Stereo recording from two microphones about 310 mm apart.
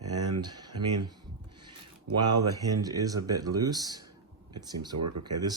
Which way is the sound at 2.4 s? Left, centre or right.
Centre.